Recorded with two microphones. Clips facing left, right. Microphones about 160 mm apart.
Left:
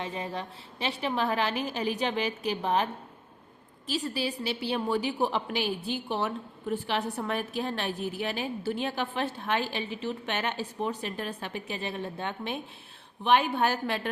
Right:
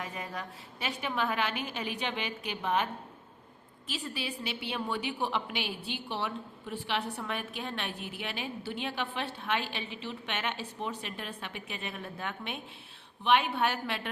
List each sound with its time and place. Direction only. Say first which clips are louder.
0.0 s a woman's voice: left 5 dB; 30° left (ahead or behind)
13.2 s a woman's voice: left 3 dB; 40° left (ahead or behind)